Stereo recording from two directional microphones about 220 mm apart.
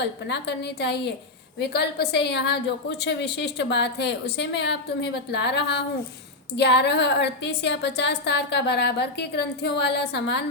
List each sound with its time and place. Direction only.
0.0 s a woman's voice: 50° left (ahead or behind)